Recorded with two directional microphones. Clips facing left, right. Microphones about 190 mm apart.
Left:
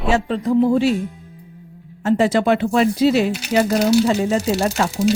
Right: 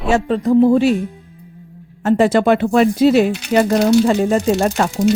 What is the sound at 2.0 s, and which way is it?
Speech, 50° right (ahead or behind).